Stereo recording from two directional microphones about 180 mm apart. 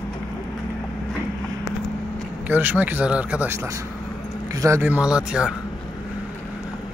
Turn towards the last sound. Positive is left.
turn(degrees=-5)  # may be behind; listen again after turning